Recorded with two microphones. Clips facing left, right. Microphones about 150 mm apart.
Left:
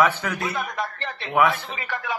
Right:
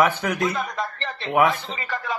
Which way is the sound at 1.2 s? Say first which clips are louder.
Right 1 dB; 15° right (ahead or behind).